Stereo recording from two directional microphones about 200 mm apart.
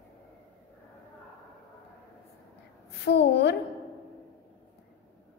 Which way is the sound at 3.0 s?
55° left (ahead or behind).